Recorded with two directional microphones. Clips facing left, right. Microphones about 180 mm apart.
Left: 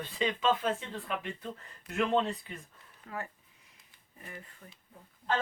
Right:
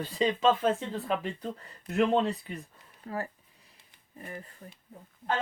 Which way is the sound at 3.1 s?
35° right (ahead or behind).